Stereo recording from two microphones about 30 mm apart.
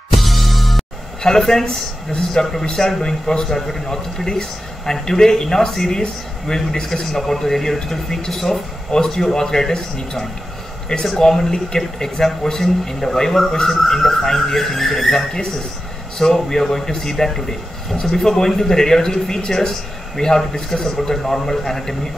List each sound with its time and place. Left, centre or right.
0.1 s music: centre
1.4 s speech: centre
11.1 s speech: centre
16.4 s speech: centre